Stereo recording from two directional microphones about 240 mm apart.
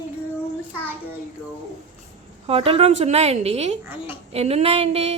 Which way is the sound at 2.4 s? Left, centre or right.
Right.